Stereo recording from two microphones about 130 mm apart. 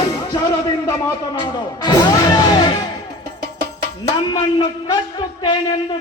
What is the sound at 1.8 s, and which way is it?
Music, 30° left (ahead or behind).